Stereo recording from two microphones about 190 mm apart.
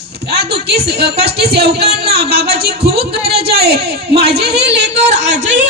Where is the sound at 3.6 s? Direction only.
55° right (ahead or behind).